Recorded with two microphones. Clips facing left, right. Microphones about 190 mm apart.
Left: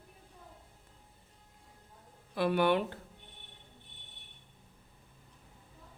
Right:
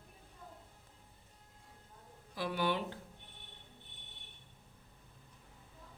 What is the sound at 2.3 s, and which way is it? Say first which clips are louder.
Speech: left 7 dB; 60° left (ahead or behind).